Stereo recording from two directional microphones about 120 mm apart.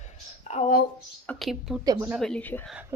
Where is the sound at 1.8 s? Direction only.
30° right (ahead or behind).